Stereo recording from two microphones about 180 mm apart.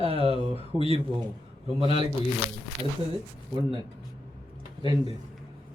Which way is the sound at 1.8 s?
30° left (ahead or behind).